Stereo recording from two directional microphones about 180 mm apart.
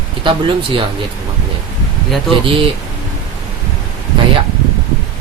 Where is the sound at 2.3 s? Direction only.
30° right (ahead or behind).